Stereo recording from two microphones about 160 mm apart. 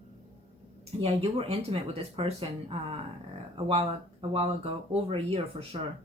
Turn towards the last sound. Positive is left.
turn(degrees=-40)  # may be behind; listen again after turning